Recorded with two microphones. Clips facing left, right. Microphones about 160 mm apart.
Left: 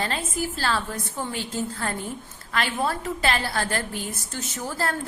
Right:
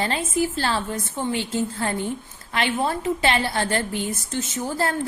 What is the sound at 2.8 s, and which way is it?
A woman's voice, 25° right (ahead or behind).